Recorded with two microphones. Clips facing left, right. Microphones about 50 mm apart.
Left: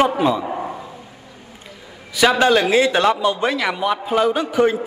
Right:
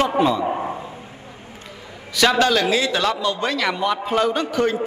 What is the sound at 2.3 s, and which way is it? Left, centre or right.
A man's voice, left.